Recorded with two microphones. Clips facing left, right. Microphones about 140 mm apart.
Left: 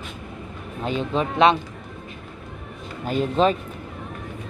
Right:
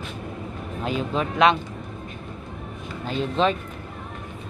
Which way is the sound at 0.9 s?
30° left (ahead or behind).